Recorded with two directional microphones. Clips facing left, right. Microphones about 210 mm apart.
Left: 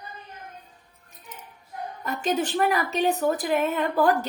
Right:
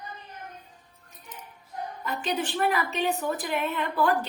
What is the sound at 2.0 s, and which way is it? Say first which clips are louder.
A woman's voice: left 4 dB; 45° left (ahead or behind).